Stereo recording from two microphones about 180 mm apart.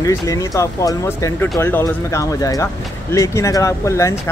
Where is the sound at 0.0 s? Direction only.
20° left (ahead or behind).